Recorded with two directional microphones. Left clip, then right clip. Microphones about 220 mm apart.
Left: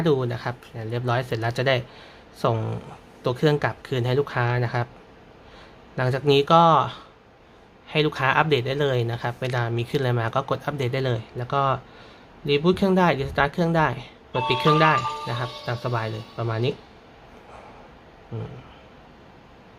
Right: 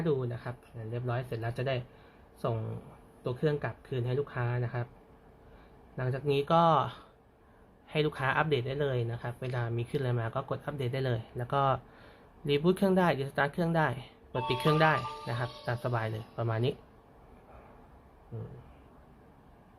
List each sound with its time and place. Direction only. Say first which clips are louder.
0.0 s speech: left 10 dB; 10° left (ahead or behind)
6.0 s speech: left 11 dB; 10° left (ahead or behind)